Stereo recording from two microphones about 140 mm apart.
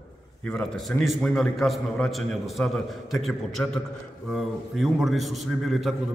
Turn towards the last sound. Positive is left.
turn(degrees=0)  # may be behind; listen again after turning